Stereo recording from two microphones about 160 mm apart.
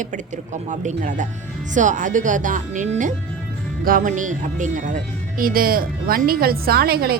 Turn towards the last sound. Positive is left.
turn(degrees=-75)  # may be behind; listen again after turning